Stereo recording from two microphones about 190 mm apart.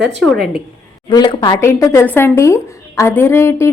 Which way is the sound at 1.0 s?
25° left (ahead or behind).